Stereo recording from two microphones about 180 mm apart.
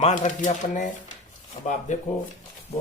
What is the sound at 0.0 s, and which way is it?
Speech, 45° left (ahead or behind).